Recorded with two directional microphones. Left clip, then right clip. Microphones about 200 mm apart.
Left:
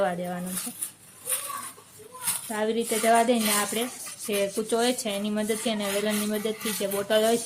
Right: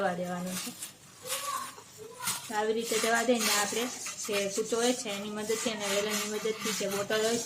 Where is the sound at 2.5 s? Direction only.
35° left (ahead or behind).